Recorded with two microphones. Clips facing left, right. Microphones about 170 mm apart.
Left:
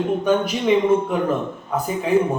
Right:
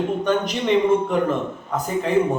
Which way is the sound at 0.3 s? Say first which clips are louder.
Left 3 dB; 10° left (ahead or behind).